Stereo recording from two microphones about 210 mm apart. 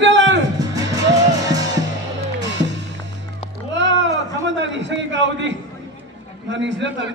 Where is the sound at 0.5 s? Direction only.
15° right (ahead or behind).